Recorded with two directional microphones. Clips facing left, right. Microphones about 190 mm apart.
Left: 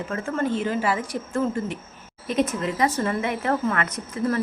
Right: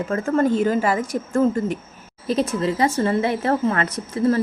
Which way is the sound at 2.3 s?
35° right (ahead or behind).